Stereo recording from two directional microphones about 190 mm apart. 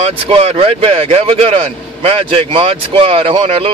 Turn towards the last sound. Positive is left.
turn(degrees=-30)  # may be behind; listen again after turning